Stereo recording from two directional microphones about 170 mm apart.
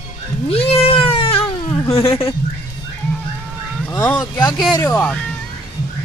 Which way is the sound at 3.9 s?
10° left (ahead or behind).